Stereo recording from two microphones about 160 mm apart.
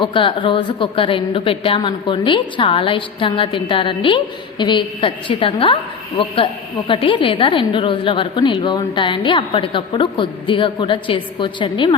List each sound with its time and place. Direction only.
0.0 s a woman's voice: 30° left (ahead or behind)